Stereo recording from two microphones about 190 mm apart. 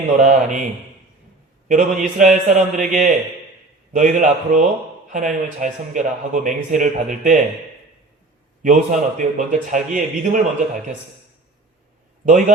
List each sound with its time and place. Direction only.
0.2 s a man's voice: 40° right (ahead or behind)
1.6 s a man's voice: 45° right (ahead or behind)
8.6 s a man's voice: 40° right (ahead or behind)
12.2 s a man's voice: 40° right (ahead or behind)